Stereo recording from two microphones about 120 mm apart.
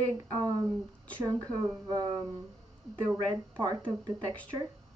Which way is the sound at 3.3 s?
40° right (ahead or behind).